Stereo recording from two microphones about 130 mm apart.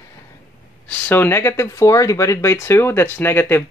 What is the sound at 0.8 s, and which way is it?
Speech, 15° left (ahead or behind).